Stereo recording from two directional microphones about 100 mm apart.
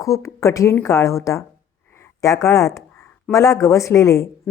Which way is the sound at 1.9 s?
30° left (ahead or behind).